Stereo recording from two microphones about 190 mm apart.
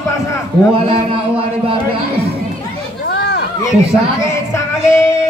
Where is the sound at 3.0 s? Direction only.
60° left (ahead or behind).